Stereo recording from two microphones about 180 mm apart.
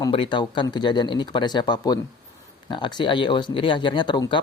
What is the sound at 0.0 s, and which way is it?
Speech, 25° left (ahead or behind).